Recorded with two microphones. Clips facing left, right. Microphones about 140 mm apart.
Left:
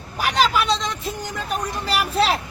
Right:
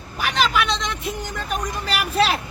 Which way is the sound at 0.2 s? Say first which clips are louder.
Left 2 dB; 35° left (ahead or behind).